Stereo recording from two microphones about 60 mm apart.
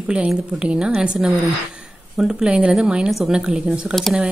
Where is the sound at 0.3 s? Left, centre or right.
Centre.